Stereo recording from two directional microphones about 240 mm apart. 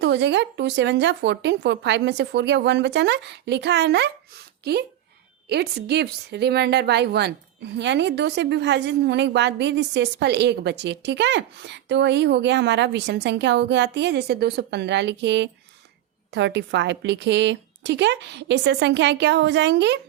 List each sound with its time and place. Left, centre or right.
0.0 s a woman's voice: right